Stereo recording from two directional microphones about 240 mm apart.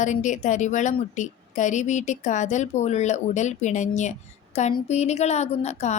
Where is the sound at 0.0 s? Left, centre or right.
Left.